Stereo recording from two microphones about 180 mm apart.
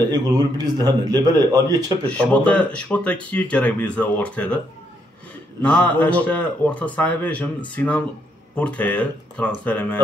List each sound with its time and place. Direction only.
0.1 s a man's voice: 20° right (ahead or behind)
2.0 s speech: 5° left (ahead or behind)
5.6 s speech: 10° left (ahead or behind)